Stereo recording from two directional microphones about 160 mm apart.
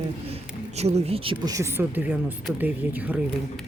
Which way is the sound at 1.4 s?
20° right (ahead or behind).